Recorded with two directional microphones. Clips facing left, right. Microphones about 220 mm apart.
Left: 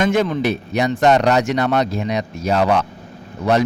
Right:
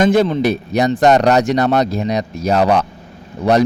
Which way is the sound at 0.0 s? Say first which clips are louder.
Right 4 dB; 35° right (ahead or behind).